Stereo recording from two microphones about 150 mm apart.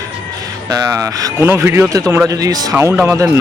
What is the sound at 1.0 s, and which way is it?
A man's voice, 20° right (ahead or behind).